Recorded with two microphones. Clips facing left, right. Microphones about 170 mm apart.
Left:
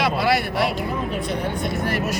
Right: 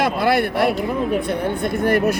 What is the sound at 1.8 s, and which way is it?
Speech, 55° right (ahead or behind).